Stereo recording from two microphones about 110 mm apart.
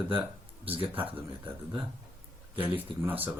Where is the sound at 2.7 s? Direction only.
15° right (ahead or behind).